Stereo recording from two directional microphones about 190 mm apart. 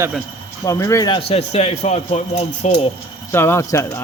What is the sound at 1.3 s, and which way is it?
Speech, 35° left (ahead or behind).